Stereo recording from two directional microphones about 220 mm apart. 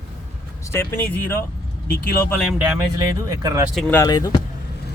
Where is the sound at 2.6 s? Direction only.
10° right (ahead or behind).